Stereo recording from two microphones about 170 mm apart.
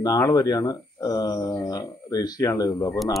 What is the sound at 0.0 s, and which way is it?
Speech, 20° left (ahead or behind).